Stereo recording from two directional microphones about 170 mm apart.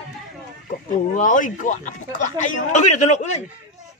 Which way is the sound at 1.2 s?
50° left (ahead or behind).